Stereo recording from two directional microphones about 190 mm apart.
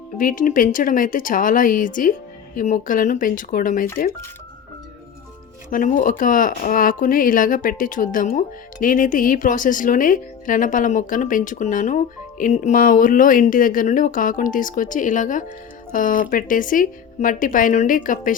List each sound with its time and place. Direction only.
0.2 s speech: 45° left (ahead or behind)
5.7 s speech: 45° left (ahead or behind)